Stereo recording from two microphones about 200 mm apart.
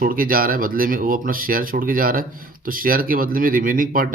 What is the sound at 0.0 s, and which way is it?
Speech, 45° right (ahead or behind).